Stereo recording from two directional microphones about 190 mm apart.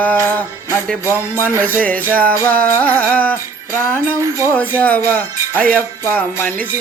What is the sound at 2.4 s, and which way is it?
Music, 10° left (ahead or behind).